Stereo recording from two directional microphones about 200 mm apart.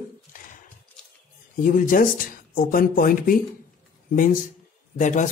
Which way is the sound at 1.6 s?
40° left (ahead or behind).